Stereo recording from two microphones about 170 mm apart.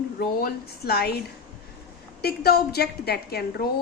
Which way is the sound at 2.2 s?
65° left (ahead or behind).